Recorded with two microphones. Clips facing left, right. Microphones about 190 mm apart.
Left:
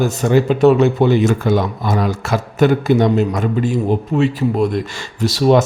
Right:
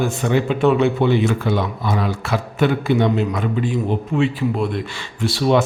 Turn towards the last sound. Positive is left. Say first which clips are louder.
# left 4 dB
turn(degrees=40)  # may be behind; listen again after turning